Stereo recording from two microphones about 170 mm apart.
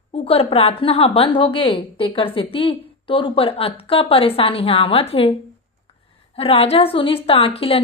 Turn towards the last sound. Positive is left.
turn(degrees=35)  # may be behind; listen again after turning